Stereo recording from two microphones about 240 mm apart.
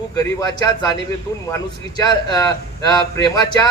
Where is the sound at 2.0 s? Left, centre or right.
Centre.